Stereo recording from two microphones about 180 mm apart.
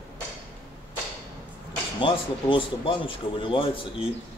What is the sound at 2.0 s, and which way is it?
Speech, 30° left (ahead or behind).